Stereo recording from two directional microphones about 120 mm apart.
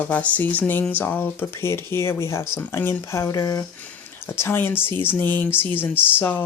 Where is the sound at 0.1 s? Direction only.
10° left (ahead or behind); by 3.7 s 30° left (ahead or behind).